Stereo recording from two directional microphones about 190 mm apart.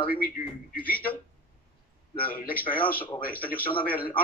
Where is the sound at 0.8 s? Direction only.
10° left (ahead or behind).